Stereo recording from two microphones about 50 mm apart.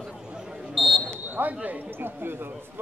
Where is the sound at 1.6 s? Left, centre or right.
Right.